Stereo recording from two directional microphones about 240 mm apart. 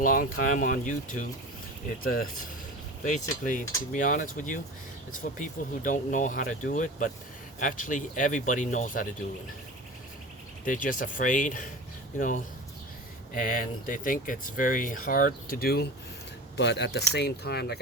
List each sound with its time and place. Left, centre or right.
0.0 s speech: left
10.7 s speech: left
13.3 s speech: left